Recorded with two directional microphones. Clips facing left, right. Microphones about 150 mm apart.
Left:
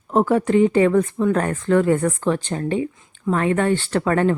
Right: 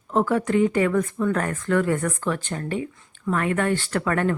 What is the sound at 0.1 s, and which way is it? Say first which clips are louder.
Speech: left 4 dB; 20° left (ahead or behind).